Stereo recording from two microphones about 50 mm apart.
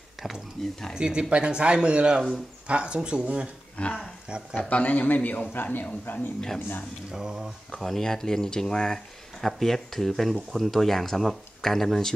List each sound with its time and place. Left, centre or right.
0.6 s speech: centre
0.9 s speech: centre
3.7 s a man's voice: left
7.1 s a sound: centre
7.8 s speech: centre